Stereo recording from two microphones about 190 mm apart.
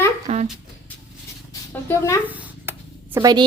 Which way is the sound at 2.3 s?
10° right (ahead or behind).